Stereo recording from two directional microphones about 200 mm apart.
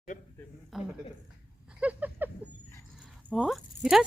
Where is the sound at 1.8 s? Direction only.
10° right (ahead or behind).